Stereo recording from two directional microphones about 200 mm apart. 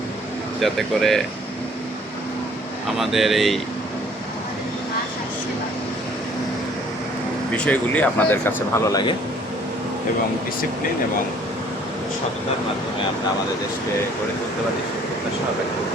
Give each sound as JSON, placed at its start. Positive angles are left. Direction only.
{"t": 0.6, "sound": "speech", "side_deg": 0}
{"t": 3.0, "sound": "speech", "side_deg": 0}
{"t": 7.5, "sound": "speech", "side_deg": 5}